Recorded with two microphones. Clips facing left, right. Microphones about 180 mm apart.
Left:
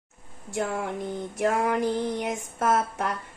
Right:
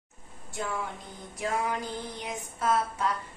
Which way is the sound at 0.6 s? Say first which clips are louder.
Left 6 dB; 55° left (ahead or behind).